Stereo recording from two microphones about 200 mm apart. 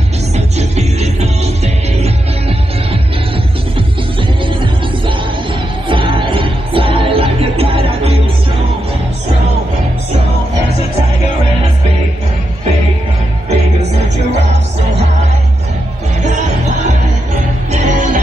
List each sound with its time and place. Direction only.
0.6 s music: 35° right (ahead or behind)
4.5 s music: 25° right (ahead or behind)
13.5 s music: 35° right (ahead or behind)
17.6 s music: 40° right (ahead or behind)